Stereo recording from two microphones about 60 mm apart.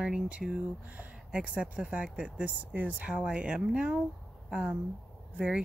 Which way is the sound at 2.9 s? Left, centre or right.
Centre.